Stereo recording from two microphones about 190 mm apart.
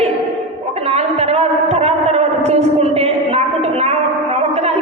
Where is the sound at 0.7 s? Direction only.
35° right (ahead or behind).